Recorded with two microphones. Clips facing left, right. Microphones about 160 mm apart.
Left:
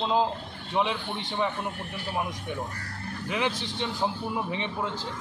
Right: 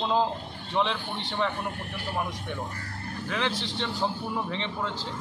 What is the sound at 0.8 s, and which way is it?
Speech, 10° left (ahead or behind).